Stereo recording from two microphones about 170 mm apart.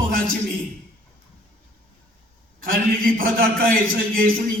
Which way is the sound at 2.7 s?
60° right (ahead or behind).